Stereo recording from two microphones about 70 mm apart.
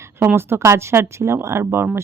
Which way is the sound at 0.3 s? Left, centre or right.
Right.